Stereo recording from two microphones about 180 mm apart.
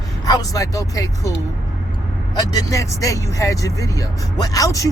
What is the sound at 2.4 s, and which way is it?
Speech, 20° left (ahead or behind).